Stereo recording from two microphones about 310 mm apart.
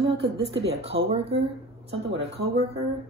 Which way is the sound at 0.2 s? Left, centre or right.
Right.